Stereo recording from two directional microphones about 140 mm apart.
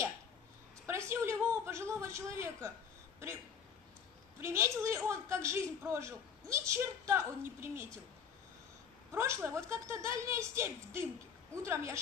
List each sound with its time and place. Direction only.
0.8 s a sound: 20° right (ahead or behind)
4.4 s a man's voice: 20° right (ahead or behind)
9.1 s a man's voice: 15° right (ahead or behind)